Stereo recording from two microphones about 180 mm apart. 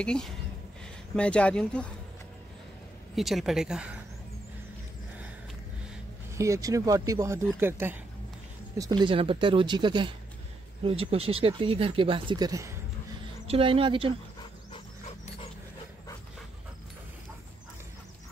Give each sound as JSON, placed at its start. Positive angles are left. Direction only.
{"t": 0.0, "sound": "speech", "side_deg": 5}
{"t": 3.2, "sound": "speech", "side_deg": 0}
{"t": 6.3, "sound": "speech", "side_deg": -15}
{"t": 8.7, "sound": "speech", "side_deg": -20}
{"t": 13.5, "sound": "speech", "side_deg": -30}